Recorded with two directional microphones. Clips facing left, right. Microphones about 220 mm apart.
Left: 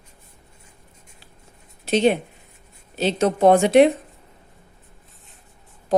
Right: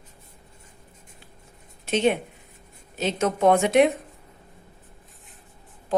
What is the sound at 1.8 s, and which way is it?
A woman's voice, 35° left (ahead or behind).